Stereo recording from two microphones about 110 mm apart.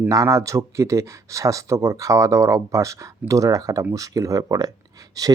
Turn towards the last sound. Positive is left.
turn(degrees=-35)  # may be behind; listen again after turning